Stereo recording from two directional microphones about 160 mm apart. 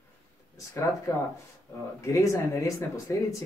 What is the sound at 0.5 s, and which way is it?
Speech, 20° left (ahead or behind).